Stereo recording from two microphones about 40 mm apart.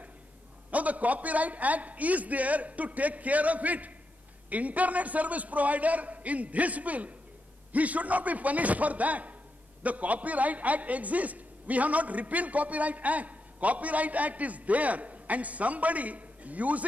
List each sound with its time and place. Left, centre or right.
0.7 s a man's voice: right